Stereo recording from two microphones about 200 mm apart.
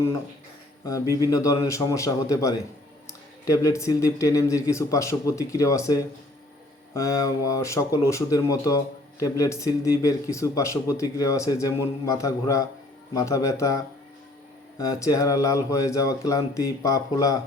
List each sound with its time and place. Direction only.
0.9 s speech: 15° left (ahead or behind)